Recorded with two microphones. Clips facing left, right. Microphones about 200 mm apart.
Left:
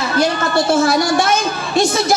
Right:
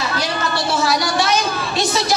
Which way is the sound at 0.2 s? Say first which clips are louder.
Left 6 dB; 50° left (ahead or behind).